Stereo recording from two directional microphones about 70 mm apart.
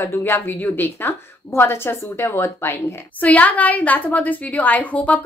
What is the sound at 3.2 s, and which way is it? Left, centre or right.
A woman's voice, left.